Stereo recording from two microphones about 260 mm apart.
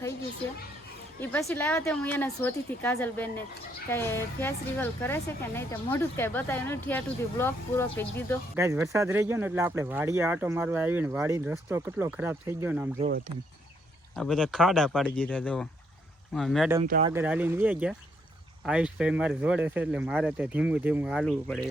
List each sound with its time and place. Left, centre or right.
1.2 s speech: centre
8.5 s speech: centre
14.2 s speech: centre
16.8 s speech: right
17.1 s speech: centre